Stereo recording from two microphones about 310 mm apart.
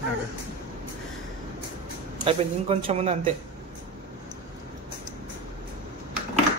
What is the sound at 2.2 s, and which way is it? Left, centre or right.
Speech, centre.